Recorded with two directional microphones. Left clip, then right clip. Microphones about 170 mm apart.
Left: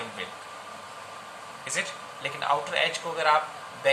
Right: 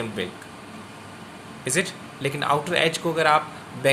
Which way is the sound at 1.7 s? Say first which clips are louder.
Right 6 dB; 75° right (ahead or behind).